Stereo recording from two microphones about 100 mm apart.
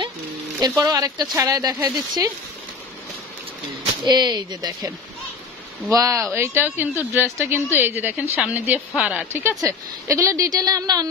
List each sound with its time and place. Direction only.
0.6 s speech: 35° right (ahead or behind)
4.0 s speech: 45° right (ahead or behind)
6.3 s a woman's voice: 25° right (ahead or behind)
9.6 s speech: 35° right (ahead or behind)